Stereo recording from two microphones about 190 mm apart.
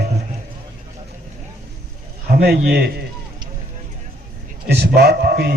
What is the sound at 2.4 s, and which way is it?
Speech, 55° right (ahead or behind).